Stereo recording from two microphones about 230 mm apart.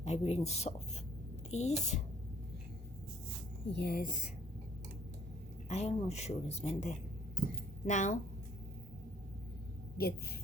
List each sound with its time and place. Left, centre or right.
0.0 s a woman's voice: left
3.7 s speech: left
5.6 s a woman's voice: left
10.0 s speech: left